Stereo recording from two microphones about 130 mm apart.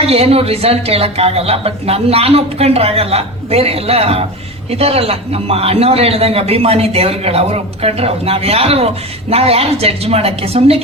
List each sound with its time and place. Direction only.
0.0 s speech: 50° right (ahead or behind)